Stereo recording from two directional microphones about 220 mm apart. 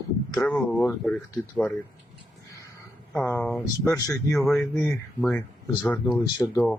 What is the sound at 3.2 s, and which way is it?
Speech, 10° left (ahead or behind).